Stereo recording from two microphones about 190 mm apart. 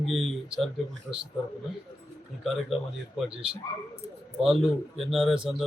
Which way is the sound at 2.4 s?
Centre (ahead or behind).